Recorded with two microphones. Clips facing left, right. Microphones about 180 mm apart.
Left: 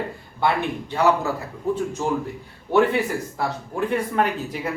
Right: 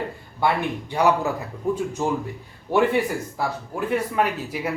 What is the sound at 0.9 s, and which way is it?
A man's voice, 15° right (ahead or behind).